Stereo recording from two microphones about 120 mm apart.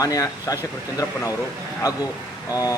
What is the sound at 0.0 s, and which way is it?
A man's voice, 30° left (ahead or behind).